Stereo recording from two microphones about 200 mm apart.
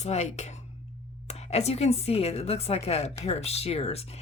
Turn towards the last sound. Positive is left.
turn(degrees=30)  # may be behind; listen again after turning